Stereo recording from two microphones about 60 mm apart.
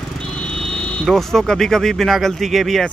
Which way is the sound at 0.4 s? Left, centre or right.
Centre.